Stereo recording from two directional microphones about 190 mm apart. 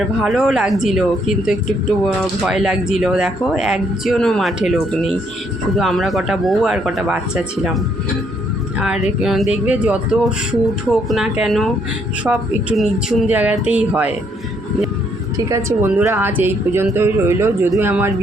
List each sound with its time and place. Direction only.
0.2 s speech: 5° right (ahead or behind)
2.0 s speech: centre (ahead or behind)
8.8 s speech: 5° right (ahead or behind)
15.4 s speech: 15° right (ahead or behind)